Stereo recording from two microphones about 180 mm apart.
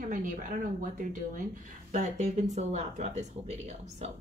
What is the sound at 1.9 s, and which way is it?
Speech, 40° right (ahead or behind).